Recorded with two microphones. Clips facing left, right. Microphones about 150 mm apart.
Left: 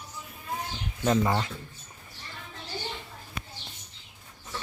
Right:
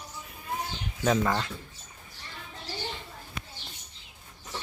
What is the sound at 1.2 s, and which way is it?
Speech, 10° left (ahead or behind).